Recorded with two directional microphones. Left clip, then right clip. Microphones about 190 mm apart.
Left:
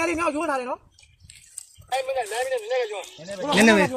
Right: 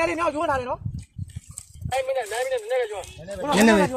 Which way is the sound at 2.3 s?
25° left (ahead or behind).